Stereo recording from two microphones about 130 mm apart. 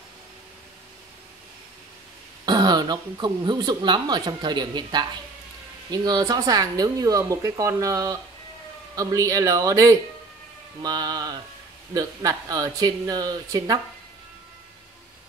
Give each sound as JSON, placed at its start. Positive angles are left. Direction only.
{"t": 2.4, "sound": "speech", "side_deg": -30}